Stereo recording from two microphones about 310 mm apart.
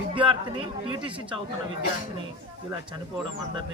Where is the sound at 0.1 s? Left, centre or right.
Centre.